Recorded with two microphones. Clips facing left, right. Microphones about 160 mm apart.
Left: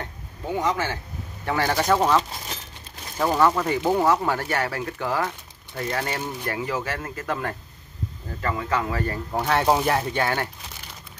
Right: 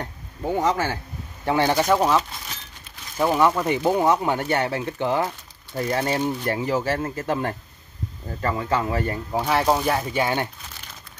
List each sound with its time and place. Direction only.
0.6 s speech: 40° right (ahead or behind)
1.4 s speech: 20° right (ahead or behind)
1.8 s speech: 10° right (ahead or behind); by 9.2 s 25° right (ahead or behind)
9.3 s speech: 5° right (ahead or behind)
10.1 s speech: 15° right (ahead or behind)